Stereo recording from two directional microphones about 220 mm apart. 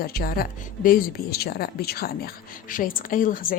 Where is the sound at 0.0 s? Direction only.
45° left (ahead or behind).